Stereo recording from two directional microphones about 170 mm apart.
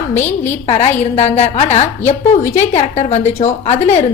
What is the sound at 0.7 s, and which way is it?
A woman's voice, 40° left (ahead or behind).